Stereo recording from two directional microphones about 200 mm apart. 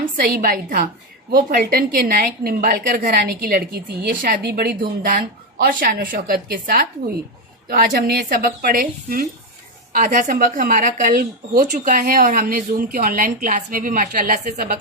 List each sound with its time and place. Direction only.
0.0 s a woman's voice: 50° right (ahead or behind)